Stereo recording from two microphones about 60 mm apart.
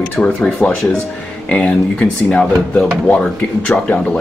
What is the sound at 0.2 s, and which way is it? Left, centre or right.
Speech, centre.